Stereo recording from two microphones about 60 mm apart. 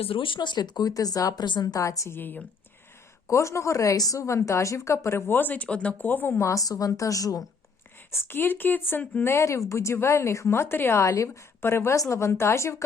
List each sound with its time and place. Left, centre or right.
0.8 s speech: left
2.1 s speech: left
3.2 s a woman's voice: left
4.2 s speech: left
5.6 s speech: centre
6.1 s speech: left
6.4 s a woman's voice: left
8.1 s speech: left
9.2 s speech: left
11.6 s speech: left
11.9 s speech: left